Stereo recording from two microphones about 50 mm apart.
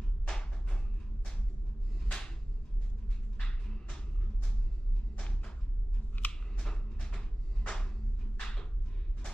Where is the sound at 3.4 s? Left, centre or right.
Centre.